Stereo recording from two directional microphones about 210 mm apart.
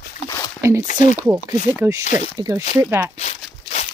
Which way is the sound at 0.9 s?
10° right (ahead or behind).